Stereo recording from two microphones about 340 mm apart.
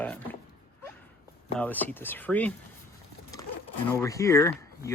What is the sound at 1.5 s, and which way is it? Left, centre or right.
Speech, centre.